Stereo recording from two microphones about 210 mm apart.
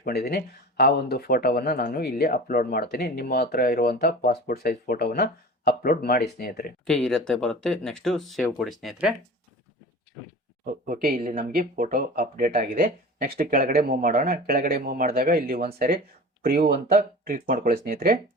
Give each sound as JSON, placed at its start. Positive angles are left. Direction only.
{"t": 0.0, "sound": "speech", "side_deg": 50}
{"t": 6.8, "sound": "speech", "side_deg": 5}
{"t": 10.6, "sound": "speech", "side_deg": -40}